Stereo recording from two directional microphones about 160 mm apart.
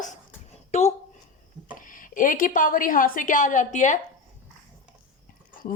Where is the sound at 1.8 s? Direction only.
55° left (ahead or behind).